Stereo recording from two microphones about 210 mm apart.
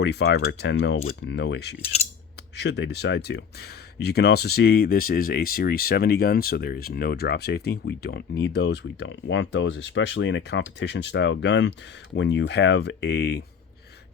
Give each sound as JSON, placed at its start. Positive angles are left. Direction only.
{"t": 0.0, "sound": "speech", "side_deg": 55}
{"t": 1.8, "sound": "cutlery", "side_deg": 30}
{"t": 2.6, "sound": "speech", "side_deg": 55}